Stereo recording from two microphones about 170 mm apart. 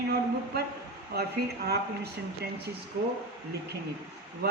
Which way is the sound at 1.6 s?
75° right (ahead or behind).